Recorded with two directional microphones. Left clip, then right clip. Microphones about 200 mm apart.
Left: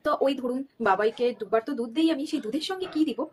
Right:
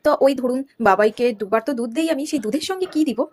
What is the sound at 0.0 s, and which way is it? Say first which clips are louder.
Speech: right 9 dB; 35° right (ahead or behind).